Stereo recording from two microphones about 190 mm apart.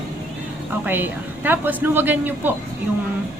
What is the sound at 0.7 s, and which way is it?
A woman's voice, 10° right (ahead or behind).